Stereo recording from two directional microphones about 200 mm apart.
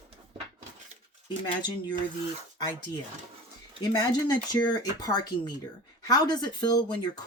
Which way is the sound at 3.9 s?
20° left (ahead or behind).